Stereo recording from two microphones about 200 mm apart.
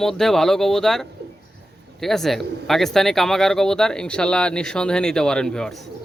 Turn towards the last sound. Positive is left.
turn(degrees=5)  # may be behind; listen again after turning